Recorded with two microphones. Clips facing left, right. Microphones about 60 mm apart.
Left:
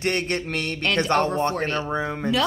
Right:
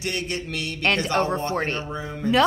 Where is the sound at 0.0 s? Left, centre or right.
Left.